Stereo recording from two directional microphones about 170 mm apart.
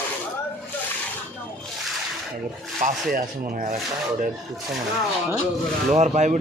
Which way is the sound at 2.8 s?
55° right (ahead or behind).